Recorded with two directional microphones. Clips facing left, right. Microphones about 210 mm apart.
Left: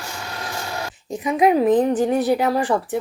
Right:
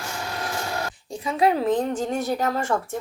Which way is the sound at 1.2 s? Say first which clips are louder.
Left 5 dB; 15° left (ahead or behind).